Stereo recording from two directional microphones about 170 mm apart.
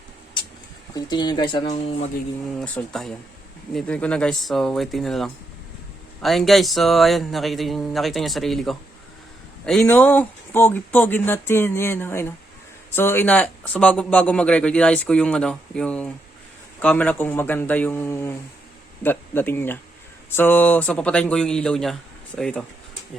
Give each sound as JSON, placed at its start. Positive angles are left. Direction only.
{"t": 0.9, "sound": "speech", "side_deg": 25}
{"t": 2.6, "sound": "a man's voice", "side_deg": 5}
{"t": 9.8, "sound": "a man's voice", "side_deg": 10}